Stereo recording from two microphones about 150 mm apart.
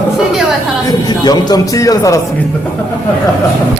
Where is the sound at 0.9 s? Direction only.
25° left (ahead or behind).